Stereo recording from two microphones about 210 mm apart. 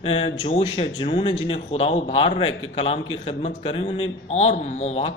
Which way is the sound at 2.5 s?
75° left (ahead or behind).